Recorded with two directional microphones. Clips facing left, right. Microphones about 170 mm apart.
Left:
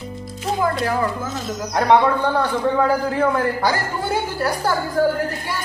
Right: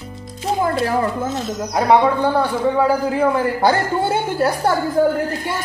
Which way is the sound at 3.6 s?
25° right (ahead or behind).